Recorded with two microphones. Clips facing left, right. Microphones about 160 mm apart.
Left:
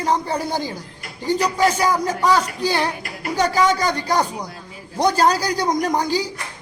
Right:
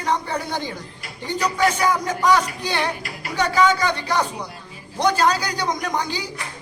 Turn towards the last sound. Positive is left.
turn(degrees=40)  # may be behind; listen again after turning